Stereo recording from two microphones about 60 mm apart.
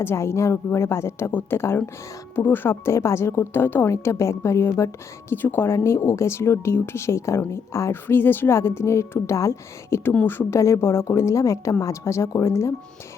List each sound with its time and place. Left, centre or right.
0.0 s a woman's voice: left
1.3 s speech: left
1.5 s a woman's voice: left
3.9 s a woman's voice: left
5.3 s a woman's voice: left
8.0 s speech: left
8.5 s a woman's voice: left
10.2 s speech: left
10.6 s a woman's voice: left